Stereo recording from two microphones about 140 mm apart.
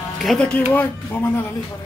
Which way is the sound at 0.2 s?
5° left (ahead or behind).